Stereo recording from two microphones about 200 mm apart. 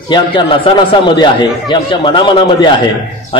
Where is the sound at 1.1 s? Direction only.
20° left (ahead or behind).